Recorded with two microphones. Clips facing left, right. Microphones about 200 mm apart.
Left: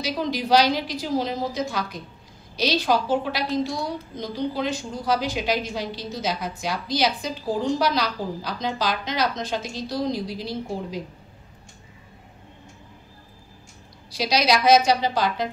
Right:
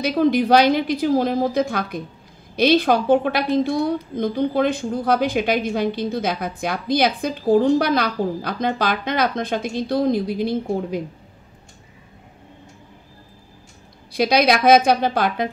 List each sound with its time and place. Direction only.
0.0 s a woman's voice: 55° right (ahead or behind)
14.1 s a woman's voice: 55° right (ahead or behind)